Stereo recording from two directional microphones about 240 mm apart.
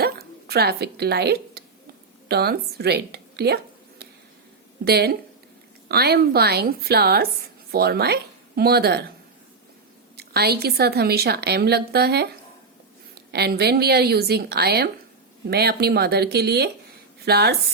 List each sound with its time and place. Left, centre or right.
0.0 s a sound: right
2.2 s a woman's voice: right
10.2 s a woman's voice: right